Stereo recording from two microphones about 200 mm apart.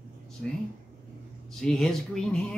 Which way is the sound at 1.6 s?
5° left (ahead or behind).